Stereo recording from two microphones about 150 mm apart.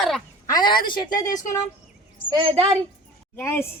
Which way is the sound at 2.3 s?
35° right (ahead or behind).